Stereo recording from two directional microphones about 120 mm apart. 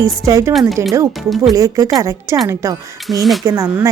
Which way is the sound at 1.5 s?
25° right (ahead or behind).